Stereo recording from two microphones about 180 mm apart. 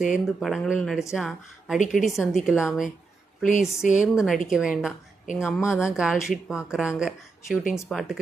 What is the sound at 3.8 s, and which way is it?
Speech, 45° left (ahead or behind).